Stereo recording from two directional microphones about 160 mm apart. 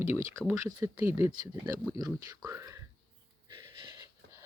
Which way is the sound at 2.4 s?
20° right (ahead or behind).